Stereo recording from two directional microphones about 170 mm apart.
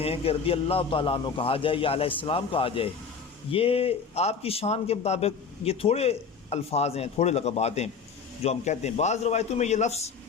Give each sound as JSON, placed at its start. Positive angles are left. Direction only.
{"t": 0.0, "sound": "a man's voice", "side_deg": 35}